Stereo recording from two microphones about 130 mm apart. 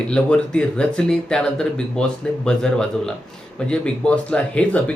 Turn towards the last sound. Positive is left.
turn(degrees=10)  # may be behind; listen again after turning